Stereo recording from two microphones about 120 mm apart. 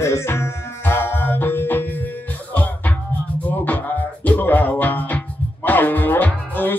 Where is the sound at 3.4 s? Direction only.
15° left (ahead or behind).